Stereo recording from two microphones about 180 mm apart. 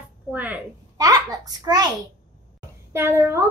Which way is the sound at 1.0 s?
20° right (ahead or behind).